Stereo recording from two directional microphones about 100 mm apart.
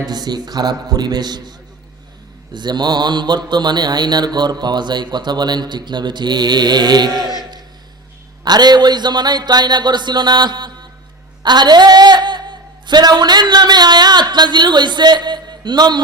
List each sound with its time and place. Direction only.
0.0 s speech: 45° right (ahead or behind)
8.4 s speech: 45° right (ahead or behind)